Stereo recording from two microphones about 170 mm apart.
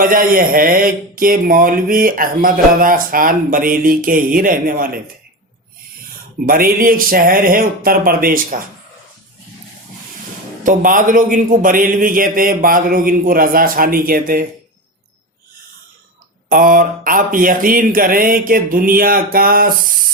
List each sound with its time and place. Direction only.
0.0 s speech: 55° right (ahead or behind)
6.4 s speech: 55° right (ahead or behind)
10.6 s speech: 50° right (ahead or behind)
16.5 s speech: 55° right (ahead or behind)